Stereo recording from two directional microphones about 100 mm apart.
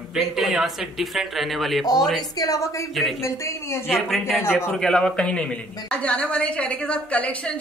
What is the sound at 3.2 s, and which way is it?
Speech, 30° left (ahead or behind).